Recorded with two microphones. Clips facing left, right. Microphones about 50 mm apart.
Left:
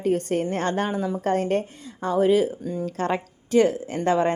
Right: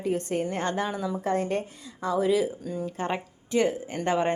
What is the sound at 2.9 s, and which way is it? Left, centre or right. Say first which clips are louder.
Speech: left 6 dB; left.